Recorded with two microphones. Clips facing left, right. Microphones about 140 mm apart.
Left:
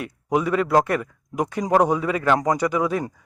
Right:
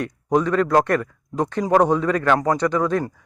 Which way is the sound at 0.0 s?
10° left (ahead or behind).